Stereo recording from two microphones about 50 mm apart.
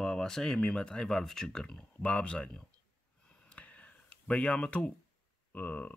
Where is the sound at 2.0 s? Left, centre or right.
Left.